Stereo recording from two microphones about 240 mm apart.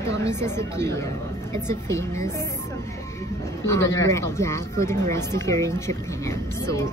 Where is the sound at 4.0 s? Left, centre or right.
Centre.